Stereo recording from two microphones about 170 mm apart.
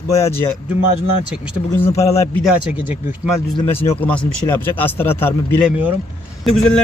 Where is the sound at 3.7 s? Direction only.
15° left (ahead or behind).